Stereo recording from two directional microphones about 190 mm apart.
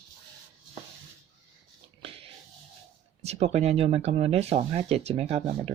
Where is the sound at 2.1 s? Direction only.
30° right (ahead or behind).